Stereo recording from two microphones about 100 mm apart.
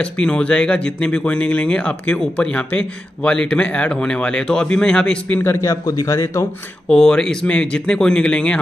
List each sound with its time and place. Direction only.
0.0 s speech: 10° left (ahead or behind)
5.4 s a man's voice: 25° left (ahead or behind)
6.9 s speech: 5° left (ahead or behind)